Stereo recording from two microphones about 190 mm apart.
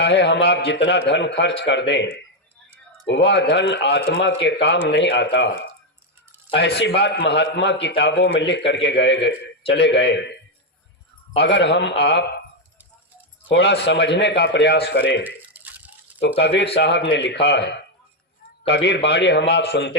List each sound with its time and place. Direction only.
0.0 s a man's voice: 65° left (ahead or behind)
11.3 s a man's voice: 65° left (ahead or behind)
13.5 s a man's voice: 65° left (ahead or behind)
15.2 s a sound: 10° right (ahead or behind)
16.7 s a man's voice: 65° left (ahead or behind)